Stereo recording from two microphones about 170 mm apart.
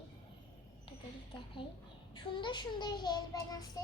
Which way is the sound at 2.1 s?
30° left (ahead or behind).